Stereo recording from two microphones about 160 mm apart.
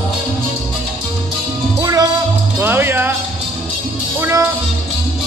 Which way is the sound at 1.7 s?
20° right (ahead or behind).